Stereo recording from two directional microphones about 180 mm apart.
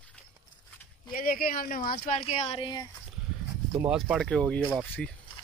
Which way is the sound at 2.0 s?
40° left (ahead or behind).